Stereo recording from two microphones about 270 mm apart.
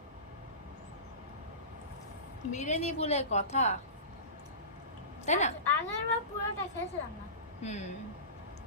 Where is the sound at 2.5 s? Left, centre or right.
Left.